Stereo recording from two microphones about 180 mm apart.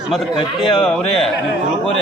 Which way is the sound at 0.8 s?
Centre (ahead or behind).